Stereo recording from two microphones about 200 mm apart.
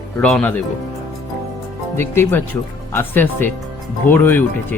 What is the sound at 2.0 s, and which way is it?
Speech, 10° left (ahead or behind).